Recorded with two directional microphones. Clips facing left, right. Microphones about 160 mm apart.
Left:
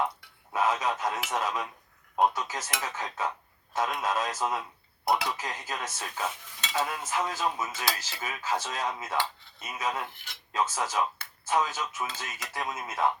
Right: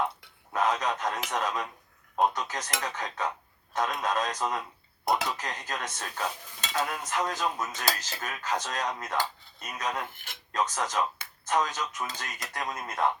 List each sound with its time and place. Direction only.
0.5 s speech: 5° left (ahead or behind)
10.1 s speech: 50° right (ahead or behind)
10.5 s speech: 5° left (ahead or behind)